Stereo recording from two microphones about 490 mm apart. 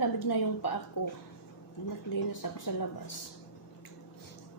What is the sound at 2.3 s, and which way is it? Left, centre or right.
Speech, left.